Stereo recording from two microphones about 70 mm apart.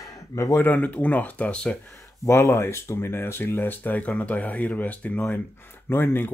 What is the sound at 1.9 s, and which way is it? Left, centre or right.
Speech, left.